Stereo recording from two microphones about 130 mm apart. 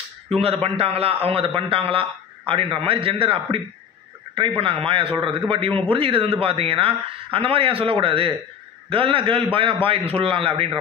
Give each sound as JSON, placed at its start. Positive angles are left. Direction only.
{"t": 0.4, "sound": "a man's voice", "side_deg": -50}